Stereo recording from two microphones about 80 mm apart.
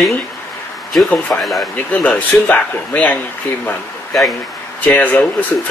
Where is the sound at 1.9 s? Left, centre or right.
Centre.